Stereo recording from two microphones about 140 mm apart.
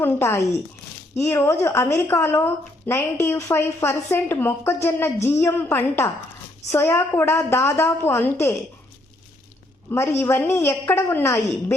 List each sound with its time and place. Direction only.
0.0 s a woman's voice: 15° left (ahead or behind)
9.9 s a woman's voice: 15° left (ahead or behind)